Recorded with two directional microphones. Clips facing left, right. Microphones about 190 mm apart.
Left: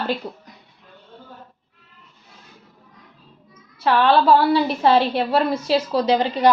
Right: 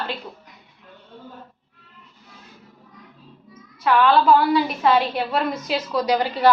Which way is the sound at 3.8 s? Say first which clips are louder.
Left 1 dB; 30° left (ahead or behind).